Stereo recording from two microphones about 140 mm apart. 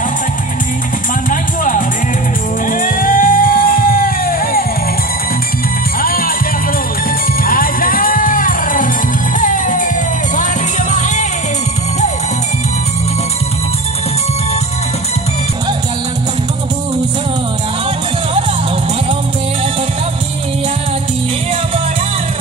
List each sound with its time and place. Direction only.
1.3 s music: 70° left (ahead or behind); by 4.6 s 90° left
5.9 s music: 90° left
7.4 s music: 90° left; by 11.2 s 60° left (ahead or behind)